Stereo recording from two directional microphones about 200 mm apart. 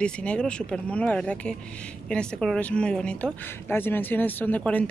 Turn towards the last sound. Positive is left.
turn(degrees=5)  # may be behind; listen again after turning